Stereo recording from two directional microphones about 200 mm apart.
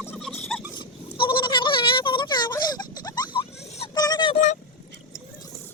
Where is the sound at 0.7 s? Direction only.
25° left (ahead or behind).